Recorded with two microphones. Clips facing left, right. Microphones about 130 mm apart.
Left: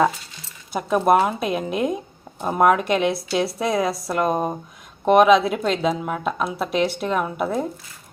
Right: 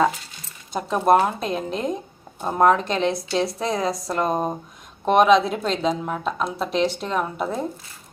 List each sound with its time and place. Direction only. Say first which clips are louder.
0.7 s a woman's voice: even; 10° left (ahead or behind)